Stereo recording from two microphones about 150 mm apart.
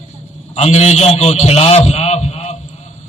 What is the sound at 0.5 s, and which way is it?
A man's voice, 45° left (ahead or behind).